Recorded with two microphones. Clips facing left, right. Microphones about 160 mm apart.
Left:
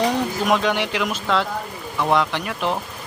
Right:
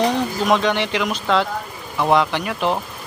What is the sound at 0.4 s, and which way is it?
Speech, 5° left (ahead or behind).